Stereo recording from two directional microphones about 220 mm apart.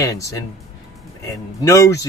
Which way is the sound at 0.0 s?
15° left (ahead or behind).